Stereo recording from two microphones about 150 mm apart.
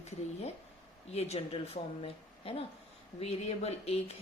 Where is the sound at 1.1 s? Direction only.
40° left (ahead or behind).